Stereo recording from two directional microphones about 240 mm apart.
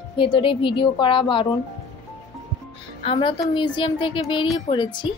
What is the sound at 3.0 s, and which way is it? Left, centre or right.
A woman's voice, left.